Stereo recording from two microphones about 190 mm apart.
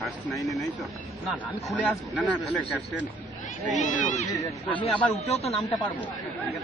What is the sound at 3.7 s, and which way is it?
Speech, 40° left (ahead or behind).